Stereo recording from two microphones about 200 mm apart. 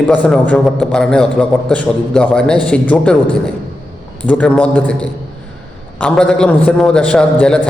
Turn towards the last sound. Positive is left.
turn(degrees=5)  # may be behind; listen again after turning